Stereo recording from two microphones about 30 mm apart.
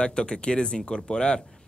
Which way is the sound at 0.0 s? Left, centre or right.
Left.